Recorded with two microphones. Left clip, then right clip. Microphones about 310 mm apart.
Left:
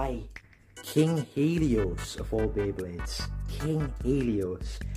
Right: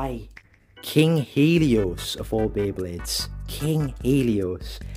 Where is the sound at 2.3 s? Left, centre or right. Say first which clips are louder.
Right 5 dB; right.